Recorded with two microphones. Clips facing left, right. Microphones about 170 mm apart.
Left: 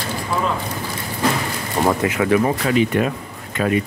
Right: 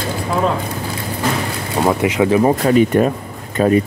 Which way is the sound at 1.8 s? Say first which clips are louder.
Right 2 dB; 15° right (ahead or behind).